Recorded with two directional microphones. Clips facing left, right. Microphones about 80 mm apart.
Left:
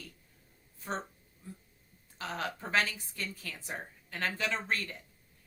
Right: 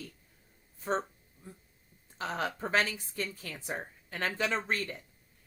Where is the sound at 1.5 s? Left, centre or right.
Right.